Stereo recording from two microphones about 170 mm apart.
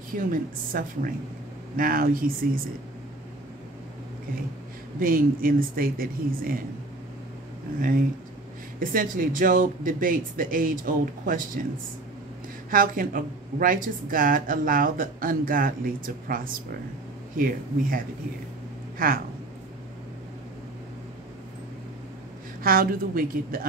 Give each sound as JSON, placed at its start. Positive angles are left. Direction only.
{"t": 0.1, "sound": "a woman's voice", "side_deg": -55}
{"t": 5.0, "sound": "a woman's voice", "side_deg": -55}
{"t": 8.7, "sound": "a woman's voice", "side_deg": -55}
{"t": 12.7, "sound": "a woman's voice", "side_deg": -55}
{"t": 22.6, "sound": "a woman's voice", "side_deg": -60}